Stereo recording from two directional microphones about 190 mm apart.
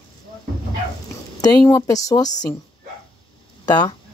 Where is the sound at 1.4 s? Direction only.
20° left (ahead or behind).